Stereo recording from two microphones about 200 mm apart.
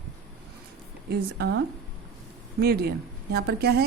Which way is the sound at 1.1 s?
60° right (ahead or behind).